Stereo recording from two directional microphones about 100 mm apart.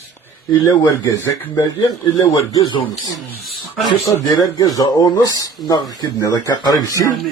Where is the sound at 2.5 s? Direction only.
35° left (ahead or behind).